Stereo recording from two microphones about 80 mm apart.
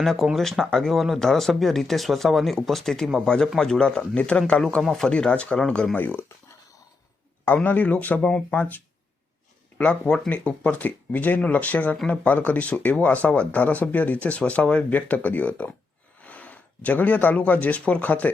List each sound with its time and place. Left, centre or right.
0.0 s speech: centre
4.8 s speech: centre
7.4 s speech: left